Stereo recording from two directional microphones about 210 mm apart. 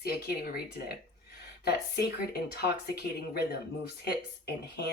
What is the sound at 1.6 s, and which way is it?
Speech, 50° left (ahead or behind).